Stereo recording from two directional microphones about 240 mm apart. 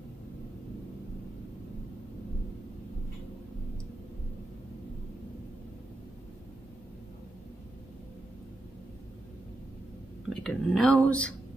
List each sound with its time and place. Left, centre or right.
10.3 s speech: centre